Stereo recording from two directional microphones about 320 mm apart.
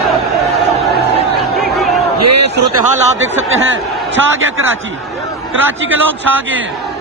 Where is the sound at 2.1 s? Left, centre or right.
Right.